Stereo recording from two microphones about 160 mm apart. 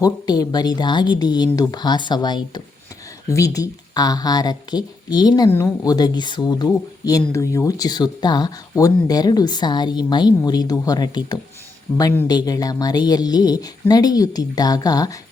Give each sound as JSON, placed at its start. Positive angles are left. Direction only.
{"t": 0.0, "sound": "speech", "side_deg": 25}
{"t": 5.5, "sound": "a woman's voice", "side_deg": 10}
{"t": 5.8, "sound": "speech", "side_deg": 25}